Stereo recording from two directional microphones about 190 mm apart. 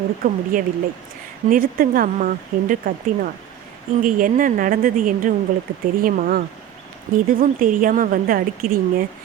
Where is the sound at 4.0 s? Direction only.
45° right (ahead or behind).